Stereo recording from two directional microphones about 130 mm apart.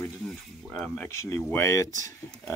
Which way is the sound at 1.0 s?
20° left (ahead or behind).